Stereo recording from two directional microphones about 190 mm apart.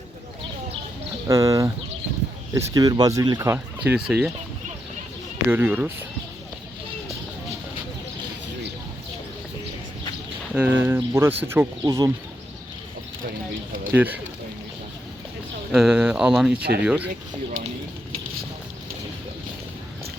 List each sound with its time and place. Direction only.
1.3 s speech: 15° right (ahead or behind)
5.5 s speech: 10° right (ahead or behind)
10.5 s speech: 10° right (ahead or behind)
13.9 s speech: 10° right (ahead or behind)
15.7 s speech: 5° right (ahead or behind)